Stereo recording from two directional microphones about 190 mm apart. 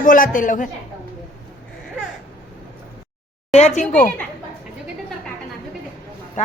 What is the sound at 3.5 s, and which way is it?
Speech, 35° left (ahead or behind).